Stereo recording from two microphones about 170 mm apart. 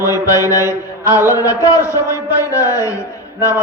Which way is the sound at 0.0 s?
20° left (ahead or behind).